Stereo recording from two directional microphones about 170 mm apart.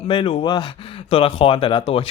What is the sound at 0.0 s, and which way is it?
Speech, 35° left (ahead or behind).